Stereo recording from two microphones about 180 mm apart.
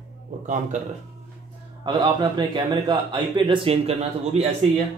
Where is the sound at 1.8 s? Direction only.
25° right (ahead or behind).